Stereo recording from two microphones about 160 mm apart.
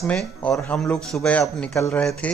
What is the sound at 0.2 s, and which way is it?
Speech, 5° left (ahead or behind).